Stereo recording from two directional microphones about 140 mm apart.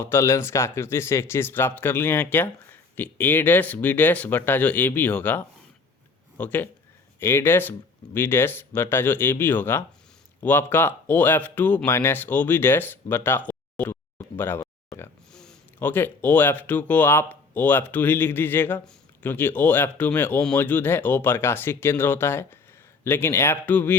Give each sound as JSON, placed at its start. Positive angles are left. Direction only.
{"t": 0.0, "sound": "speech", "side_deg": 20}
{"t": 15.3, "sound": "speech", "side_deg": 5}